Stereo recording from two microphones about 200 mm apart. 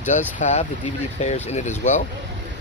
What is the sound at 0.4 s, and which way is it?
Speech, 35° left (ahead or behind).